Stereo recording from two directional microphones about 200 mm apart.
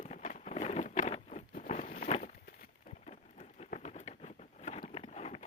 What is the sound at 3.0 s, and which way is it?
Patter, 35° left (ahead or behind).